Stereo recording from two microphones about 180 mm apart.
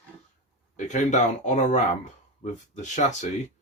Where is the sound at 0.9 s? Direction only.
40° left (ahead or behind).